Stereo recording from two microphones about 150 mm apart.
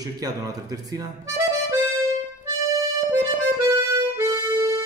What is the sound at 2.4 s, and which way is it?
Music, 20° right (ahead or behind).